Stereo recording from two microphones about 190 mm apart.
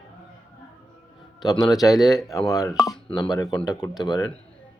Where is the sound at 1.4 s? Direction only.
20° left (ahead or behind).